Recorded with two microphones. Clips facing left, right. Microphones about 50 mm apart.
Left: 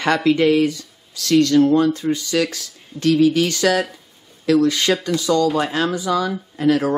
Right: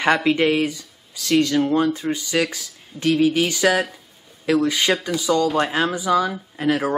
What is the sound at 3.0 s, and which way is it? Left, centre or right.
Speech, centre.